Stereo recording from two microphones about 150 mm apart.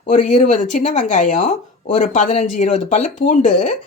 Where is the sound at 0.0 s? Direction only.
55° left (ahead or behind).